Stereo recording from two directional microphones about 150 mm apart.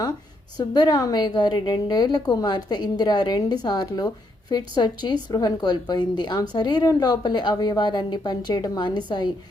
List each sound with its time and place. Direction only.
0.7 s a woman's voice: 25° left (ahead or behind)